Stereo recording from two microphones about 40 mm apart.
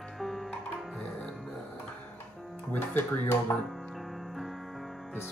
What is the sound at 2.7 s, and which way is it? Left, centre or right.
Speech, left.